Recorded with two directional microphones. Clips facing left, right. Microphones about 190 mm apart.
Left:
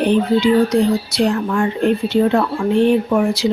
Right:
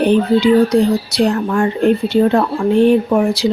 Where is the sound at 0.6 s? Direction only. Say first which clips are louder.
Right 2 dB; 40° right (ahead or behind).